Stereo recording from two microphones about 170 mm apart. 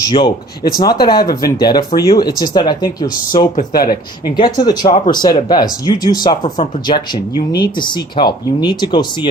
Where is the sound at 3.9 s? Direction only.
25° left (ahead or behind).